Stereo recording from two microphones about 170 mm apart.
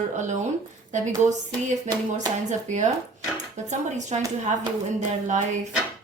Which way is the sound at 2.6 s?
45° right (ahead or behind).